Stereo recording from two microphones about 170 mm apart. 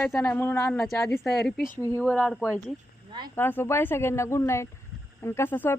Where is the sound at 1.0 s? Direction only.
Centre (ahead or behind).